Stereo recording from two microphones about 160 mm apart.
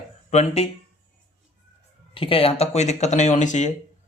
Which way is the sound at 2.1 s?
35° left (ahead or behind).